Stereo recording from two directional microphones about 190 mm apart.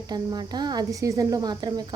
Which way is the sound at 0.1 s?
20° right (ahead or behind).